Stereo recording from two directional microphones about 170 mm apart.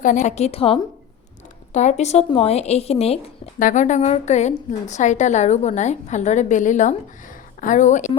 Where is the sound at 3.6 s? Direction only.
50° left (ahead or behind).